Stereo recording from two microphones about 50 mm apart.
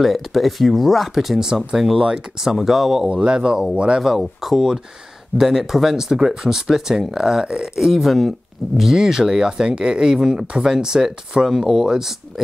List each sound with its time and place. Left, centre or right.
0.0 s speech: centre
3.1 s speech: right
4.0 s speech: centre